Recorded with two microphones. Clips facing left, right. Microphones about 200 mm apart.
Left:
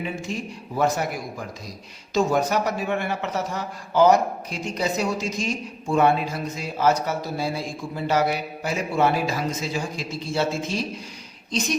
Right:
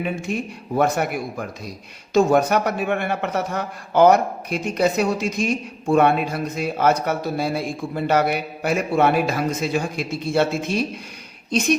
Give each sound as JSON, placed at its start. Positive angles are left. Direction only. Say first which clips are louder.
{"t": 0.0, "sound": "a man's voice", "louder": "right 4 dB", "side_deg": -60}